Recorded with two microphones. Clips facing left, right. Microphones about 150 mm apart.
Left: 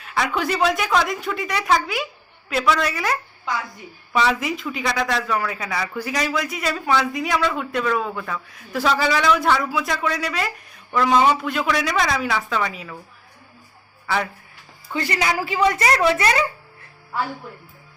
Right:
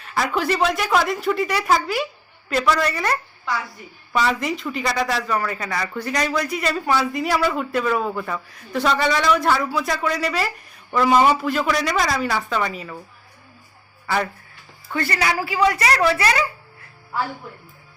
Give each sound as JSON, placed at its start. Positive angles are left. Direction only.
{"t": 0.0, "sound": "speech", "side_deg": 0}
{"t": 14.9, "sound": "speech", "side_deg": 20}